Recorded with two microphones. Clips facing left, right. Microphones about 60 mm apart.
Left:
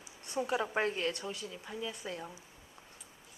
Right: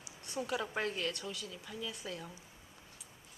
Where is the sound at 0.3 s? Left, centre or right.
Centre.